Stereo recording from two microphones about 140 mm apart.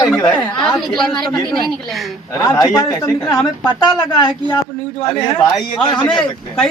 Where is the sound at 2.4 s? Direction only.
25° left (ahead or behind).